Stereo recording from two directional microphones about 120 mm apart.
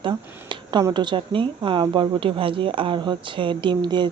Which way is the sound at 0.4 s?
40° right (ahead or behind).